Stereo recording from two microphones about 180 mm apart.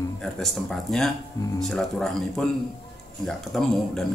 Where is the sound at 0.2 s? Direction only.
Centre (ahead or behind).